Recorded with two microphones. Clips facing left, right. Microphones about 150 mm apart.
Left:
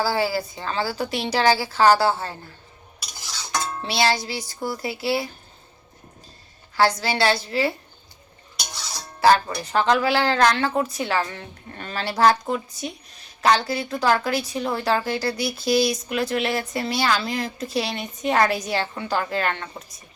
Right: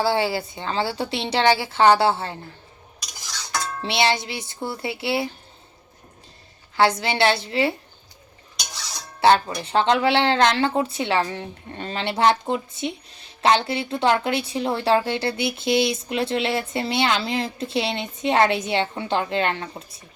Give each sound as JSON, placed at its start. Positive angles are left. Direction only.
{"t": 0.0, "sound": "speech", "side_deg": -25}
{"t": 3.8, "sound": "speech", "side_deg": -25}
{"t": 6.7, "sound": "speech", "side_deg": -25}
{"t": 9.6, "sound": "speech", "side_deg": -25}